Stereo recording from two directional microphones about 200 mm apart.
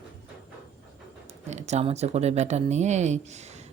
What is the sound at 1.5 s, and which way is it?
Speech, 35° right (ahead or behind).